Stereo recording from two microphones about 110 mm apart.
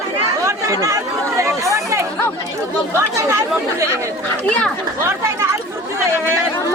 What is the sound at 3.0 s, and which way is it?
Speech, 25° right (ahead or behind).